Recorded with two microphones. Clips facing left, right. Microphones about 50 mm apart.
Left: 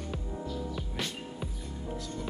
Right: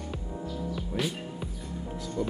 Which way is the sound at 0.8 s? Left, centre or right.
Centre.